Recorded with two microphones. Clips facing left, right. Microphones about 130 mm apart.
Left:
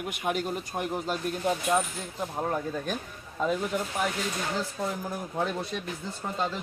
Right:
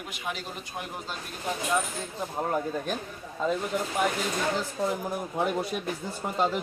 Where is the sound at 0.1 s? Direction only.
50° left (ahead or behind).